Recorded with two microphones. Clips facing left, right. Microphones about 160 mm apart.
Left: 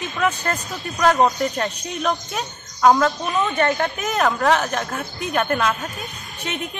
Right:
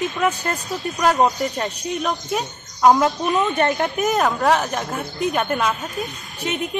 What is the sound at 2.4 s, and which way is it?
Speech, 15° right (ahead or behind).